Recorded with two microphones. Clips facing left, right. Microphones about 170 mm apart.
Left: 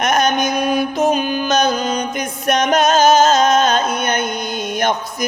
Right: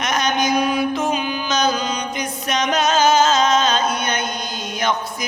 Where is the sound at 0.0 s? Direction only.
55° left (ahead or behind).